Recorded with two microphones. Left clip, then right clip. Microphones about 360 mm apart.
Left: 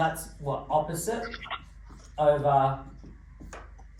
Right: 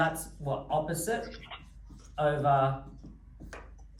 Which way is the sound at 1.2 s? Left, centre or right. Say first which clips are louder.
Left 6 dB; left.